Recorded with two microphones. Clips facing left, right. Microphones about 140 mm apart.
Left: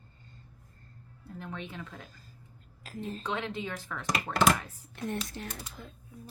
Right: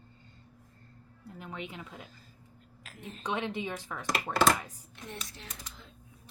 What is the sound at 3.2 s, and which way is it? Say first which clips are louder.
Speech: right 3 dB; 15° right (ahead or behind).